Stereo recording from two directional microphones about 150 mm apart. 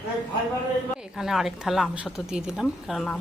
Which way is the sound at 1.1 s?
Centre (ahead or behind).